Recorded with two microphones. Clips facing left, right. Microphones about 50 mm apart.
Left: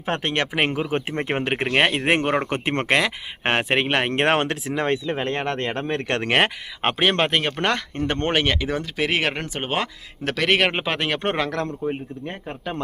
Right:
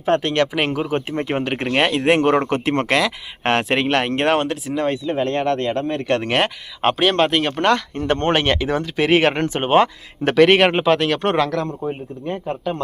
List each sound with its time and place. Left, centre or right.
0.0 s speech: left
4.1 s speech: left
6.8 s speech: left
7.4 s speech: centre
7.7 s speech: centre
8.1 s speech: centre
10.8 s speech: centre